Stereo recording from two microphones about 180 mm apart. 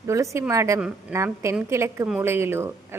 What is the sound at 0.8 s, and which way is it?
A woman's voice, 5° right (ahead or behind).